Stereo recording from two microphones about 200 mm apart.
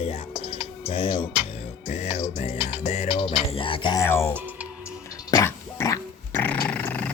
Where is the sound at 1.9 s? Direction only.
35° left (ahead or behind).